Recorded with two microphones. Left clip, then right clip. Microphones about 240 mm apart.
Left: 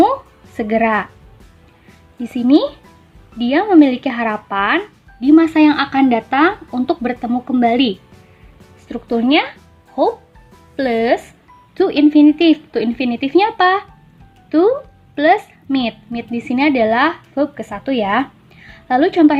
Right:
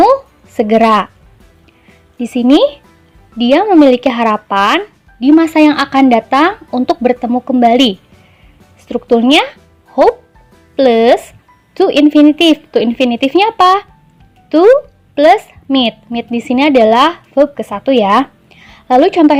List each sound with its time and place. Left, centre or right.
0.0 s a sound: right
2.1 s speech: right
10.8 s a woman's voice: right